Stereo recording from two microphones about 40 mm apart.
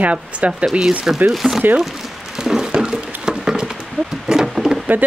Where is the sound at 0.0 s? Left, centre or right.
Right.